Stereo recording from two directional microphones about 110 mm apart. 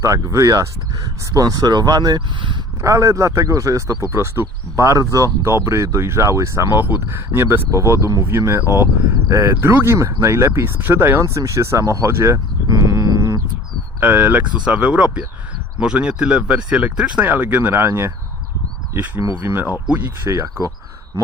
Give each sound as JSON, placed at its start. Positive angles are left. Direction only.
{"t": 0.0, "sound": "speech", "side_deg": -30}
{"t": 2.8, "sound": "speech", "side_deg": -30}
{"t": 12.6, "sound": "livestock", "side_deg": -30}
{"t": 14.0, "sound": "speech", "side_deg": -15}
{"t": 20.3, "sound": "speech", "side_deg": -30}